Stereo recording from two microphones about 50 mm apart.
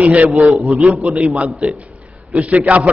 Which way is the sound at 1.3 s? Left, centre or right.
Right.